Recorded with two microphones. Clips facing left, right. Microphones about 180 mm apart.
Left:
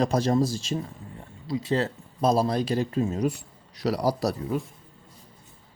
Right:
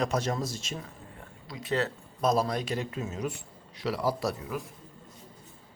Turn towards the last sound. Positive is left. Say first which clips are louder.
# left 5 dB
turn(degrees=35)  # may be behind; listen again after turning